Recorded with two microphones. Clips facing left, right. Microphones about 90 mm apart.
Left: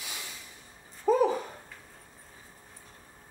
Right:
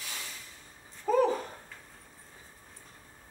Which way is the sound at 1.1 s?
15° left (ahead or behind).